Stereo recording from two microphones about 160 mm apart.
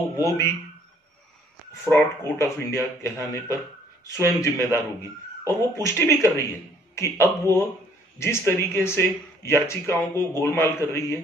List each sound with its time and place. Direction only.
0.2 s speech: 20° left (ahead or behind)
1.9 s speech: 15° left (ahead or behind)